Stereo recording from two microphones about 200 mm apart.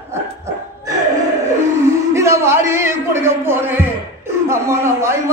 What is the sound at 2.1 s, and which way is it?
Music, 15° right (ahead or behind).